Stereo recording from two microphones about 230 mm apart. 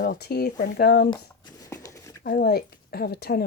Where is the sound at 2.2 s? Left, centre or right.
Left.